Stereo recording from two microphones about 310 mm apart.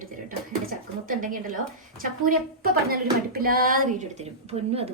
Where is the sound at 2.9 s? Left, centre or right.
Right.